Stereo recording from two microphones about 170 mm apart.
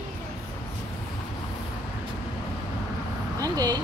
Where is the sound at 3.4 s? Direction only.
20° right (ahead or behind).